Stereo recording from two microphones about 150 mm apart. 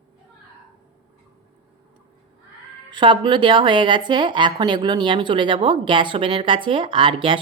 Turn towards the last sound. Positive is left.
turn(degrees=-35)  # may be behind; listen again after turning